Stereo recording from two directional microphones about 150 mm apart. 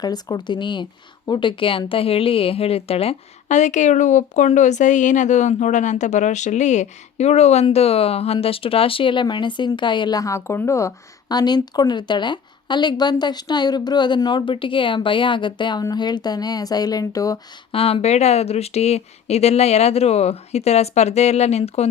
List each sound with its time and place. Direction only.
0.0 s speech: 25° left (ahead or behind)
17.7 s speech: 40° left (ahead or behind)